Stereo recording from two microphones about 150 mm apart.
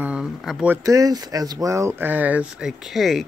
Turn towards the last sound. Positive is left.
turn(degrees=0)  # may be behind; listen again after turning